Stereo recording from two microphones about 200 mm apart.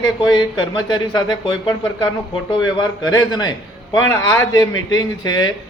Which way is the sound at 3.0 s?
20° left (ahead or behind).